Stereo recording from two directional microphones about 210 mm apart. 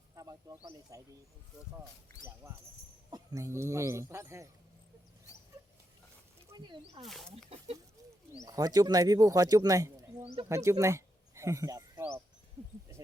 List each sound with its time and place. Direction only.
0.2 s speech: 15° right (ahead or behind)
2.4 s speech: 15° right (ahead or behind)
6.5 s snake: 15° right (ahead or behind)
7.0 s speech: centre (ahead or behind)
8.4 s speech: 20° right (ahead or behind)